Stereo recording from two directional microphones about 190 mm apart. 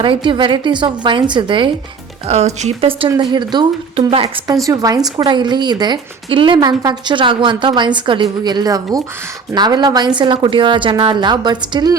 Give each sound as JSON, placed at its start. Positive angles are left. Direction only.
{"t": 0.0, "sound": "speech", "side_deg": -25}